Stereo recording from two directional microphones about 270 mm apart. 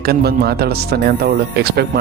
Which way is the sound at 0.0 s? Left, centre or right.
Right.